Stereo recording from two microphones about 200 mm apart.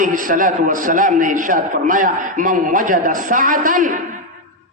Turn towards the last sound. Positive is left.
turn(degrees=-40)  # may be behind; listen again after turning